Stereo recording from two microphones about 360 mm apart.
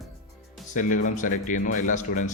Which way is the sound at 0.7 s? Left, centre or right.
Left.